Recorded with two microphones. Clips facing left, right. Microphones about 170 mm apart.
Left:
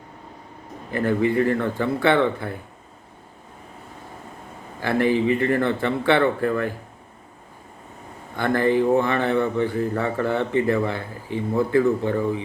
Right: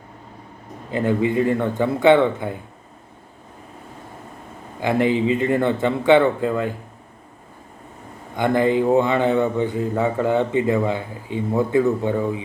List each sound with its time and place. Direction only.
0.9 s speech: 20° right (ahead or behind)
4.8 s speech: 15° right (ahead or behind)
8.4 s speech: 15° right (ahead or behind)